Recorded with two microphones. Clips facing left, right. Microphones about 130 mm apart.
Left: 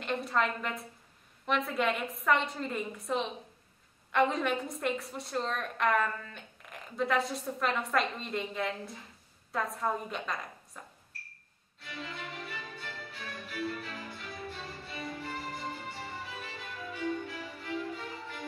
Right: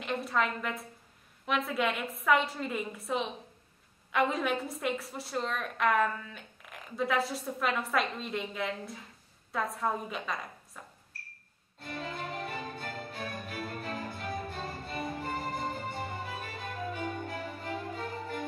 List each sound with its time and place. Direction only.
0.0 s a sound: centre (ahead or behind)
1.4 s a woman's voice: centre (ahead or behind)
11.8 s violin: 45° right (ahead or behind)